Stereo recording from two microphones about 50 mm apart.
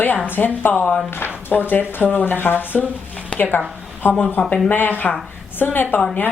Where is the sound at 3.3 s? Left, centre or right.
Left.